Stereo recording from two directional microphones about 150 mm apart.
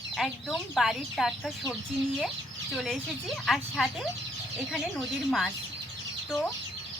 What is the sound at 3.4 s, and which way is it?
Speech, centre (ahead or behind).